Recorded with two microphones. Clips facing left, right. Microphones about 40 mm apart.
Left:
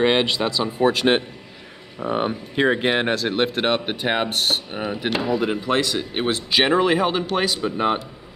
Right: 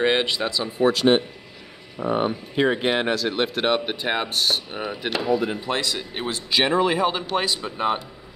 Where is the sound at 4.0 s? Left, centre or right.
Left.